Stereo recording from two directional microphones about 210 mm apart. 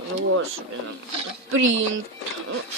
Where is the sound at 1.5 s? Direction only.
70° right (ahead or behind).